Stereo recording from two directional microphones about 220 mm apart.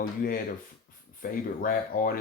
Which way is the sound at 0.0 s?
40° left (ahead or behind).